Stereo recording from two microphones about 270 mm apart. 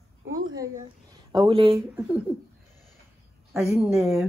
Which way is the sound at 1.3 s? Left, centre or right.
Centre.